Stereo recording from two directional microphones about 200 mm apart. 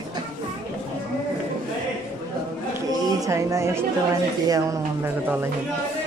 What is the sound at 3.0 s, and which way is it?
Speech, 15° right (ahead or behind).